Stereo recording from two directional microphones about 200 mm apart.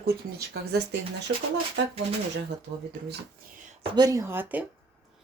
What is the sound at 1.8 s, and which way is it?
Speech, 60° right (ahead or behind).